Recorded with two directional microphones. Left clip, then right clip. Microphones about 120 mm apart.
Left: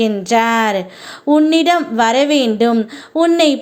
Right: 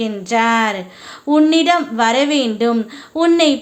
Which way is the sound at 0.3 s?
45° left (ahead or behind).